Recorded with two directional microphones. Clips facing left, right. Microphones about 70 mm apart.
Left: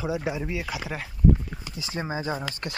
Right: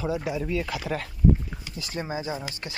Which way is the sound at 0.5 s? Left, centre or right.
Centre.